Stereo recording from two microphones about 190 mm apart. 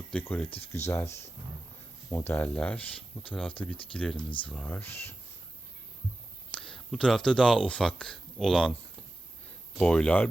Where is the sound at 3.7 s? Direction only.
30° left (ahead or behind).